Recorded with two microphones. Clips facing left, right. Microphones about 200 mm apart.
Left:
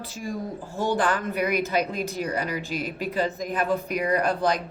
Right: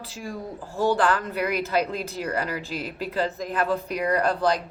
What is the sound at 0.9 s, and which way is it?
Speech, 15° left (ahead or behind).